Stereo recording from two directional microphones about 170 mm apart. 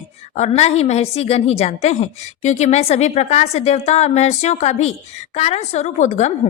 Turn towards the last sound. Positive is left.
turn(degrees=45)  # may be behind; listen again after turning